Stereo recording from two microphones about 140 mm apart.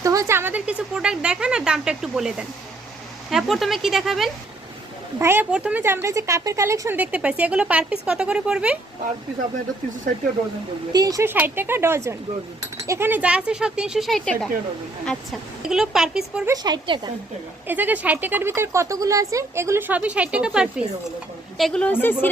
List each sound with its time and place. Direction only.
0.0 s speech: 25° right (ahead or behind); by 4.3 s centre (ahead or behind)
5.2 s speech: 15° right (ahead or behind)
10.9 s a woman's voice: 25° right (ahead or behind); by 16.4 s 5° right (ahead or behind)
16.5 s a woman's voice: 30° right (ahead or behind)
17.7 s speech: 10° right (ahead or behind)
21.6 s a woman's voice: 10° left (ahead or behind)